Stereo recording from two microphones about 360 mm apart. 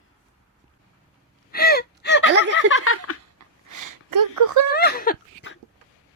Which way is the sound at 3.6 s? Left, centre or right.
Right.